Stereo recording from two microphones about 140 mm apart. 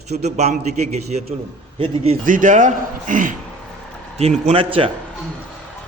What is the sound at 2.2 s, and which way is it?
A man's voice, 70° right (ahead or behind).